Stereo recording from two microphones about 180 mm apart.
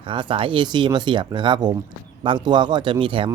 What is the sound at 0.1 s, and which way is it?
A man's voice, 30° right (ahead or behind).